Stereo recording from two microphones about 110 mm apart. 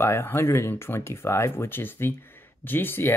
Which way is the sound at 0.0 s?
25° left (ahead or behind).